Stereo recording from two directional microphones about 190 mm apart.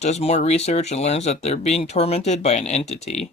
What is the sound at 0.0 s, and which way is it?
Speech, 35° left (ahead or behind).